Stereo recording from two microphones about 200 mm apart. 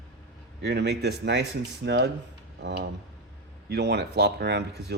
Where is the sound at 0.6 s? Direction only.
55° right (ahead or behind).